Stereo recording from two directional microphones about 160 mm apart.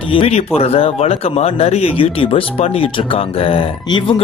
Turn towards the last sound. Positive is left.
turn(degrees=35)  # may be behind; listen again after turning